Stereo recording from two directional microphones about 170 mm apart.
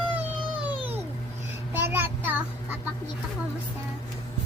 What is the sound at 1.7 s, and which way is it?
Child singing, 10° right (ahead or behind).